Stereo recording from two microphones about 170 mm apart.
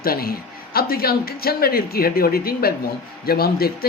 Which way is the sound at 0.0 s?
60° left (ahead or behind).